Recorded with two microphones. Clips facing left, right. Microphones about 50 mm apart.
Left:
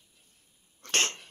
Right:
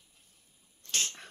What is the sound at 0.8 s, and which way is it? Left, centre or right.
Sneeze, left.